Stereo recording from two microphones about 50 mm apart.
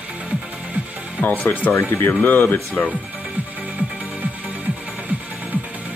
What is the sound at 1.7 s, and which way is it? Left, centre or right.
Speech, left.